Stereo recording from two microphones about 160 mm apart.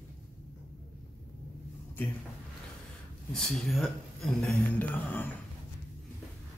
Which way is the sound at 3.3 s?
Centre (ahead or behind).